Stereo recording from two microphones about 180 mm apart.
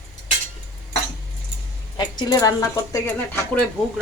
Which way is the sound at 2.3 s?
20° left (ahead or behind).